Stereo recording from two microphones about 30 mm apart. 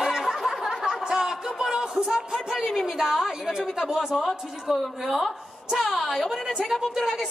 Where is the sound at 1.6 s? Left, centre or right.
Right.